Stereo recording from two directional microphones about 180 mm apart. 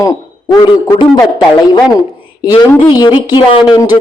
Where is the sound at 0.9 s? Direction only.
20° left (ahead or behind).